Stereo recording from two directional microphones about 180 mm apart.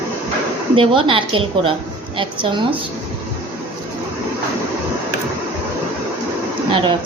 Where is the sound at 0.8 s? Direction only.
30° right (ahead or behind).